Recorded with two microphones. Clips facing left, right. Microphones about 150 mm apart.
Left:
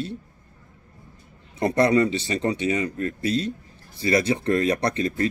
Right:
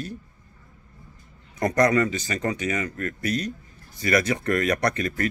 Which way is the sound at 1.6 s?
30° left (ahead or behind).